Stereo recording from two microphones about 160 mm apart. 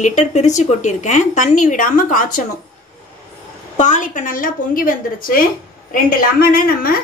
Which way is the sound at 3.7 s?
50° left (ahead or behind).